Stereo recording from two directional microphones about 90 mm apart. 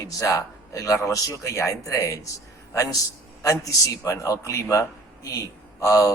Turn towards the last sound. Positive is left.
turn(degrees=35)  # may be behind; listen again after turning